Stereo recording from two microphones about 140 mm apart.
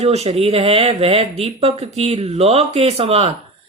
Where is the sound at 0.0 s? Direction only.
50° right (ahead or behind).